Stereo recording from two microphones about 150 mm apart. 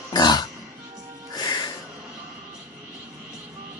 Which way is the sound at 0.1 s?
25° left (ahead or behind).